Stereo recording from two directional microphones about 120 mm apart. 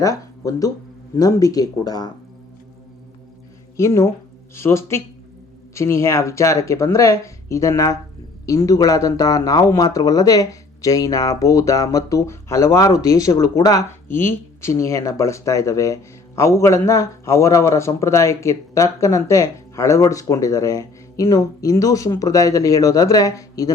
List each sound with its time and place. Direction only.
0.0 s speech: 30° left (ahead or behind)
3.8 s speech: 25° left (ahead or behind)
14.1 s speech: 20° left (ahead or behind)